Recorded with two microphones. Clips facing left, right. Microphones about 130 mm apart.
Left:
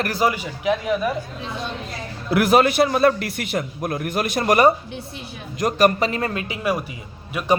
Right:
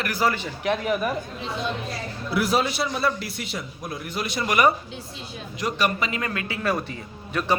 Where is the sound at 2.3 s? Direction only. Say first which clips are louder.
Left 7 dB; 60° left (ahead or behind).